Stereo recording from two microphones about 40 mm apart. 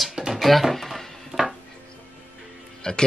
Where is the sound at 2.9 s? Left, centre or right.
Left.